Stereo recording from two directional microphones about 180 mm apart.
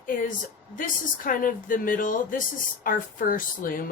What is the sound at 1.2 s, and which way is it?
Speech, 50° left (ahead or behind).